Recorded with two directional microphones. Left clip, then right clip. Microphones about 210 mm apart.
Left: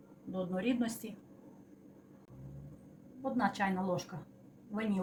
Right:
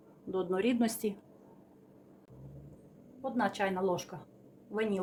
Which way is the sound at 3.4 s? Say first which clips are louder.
Right 3 dB; 50° right (ahead or behind).